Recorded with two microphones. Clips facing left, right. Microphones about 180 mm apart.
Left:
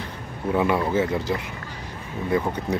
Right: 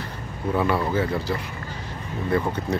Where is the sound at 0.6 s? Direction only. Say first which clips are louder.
Left 1 dB; 20° left (ahead or behind).